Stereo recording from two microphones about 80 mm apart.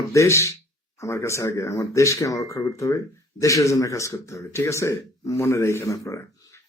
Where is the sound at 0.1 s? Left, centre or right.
Left.